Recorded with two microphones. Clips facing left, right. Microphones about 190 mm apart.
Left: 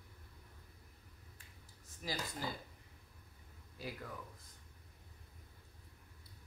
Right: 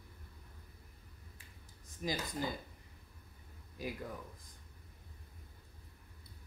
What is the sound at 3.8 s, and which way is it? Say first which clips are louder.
Speech: right 4 dB; 15° right (ahead or behind).